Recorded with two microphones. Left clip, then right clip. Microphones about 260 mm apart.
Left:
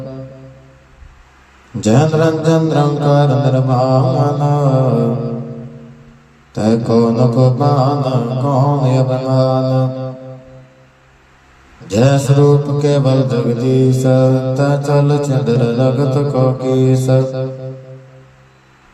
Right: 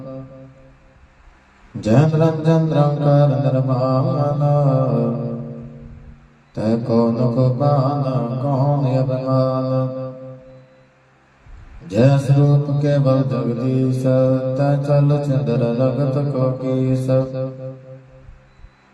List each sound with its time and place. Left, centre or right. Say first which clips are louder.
1.8 s mantra: left 4 dB; left
6.5 s mantra: left 5 dB; left
11.9 s mantra: left 4 dB; left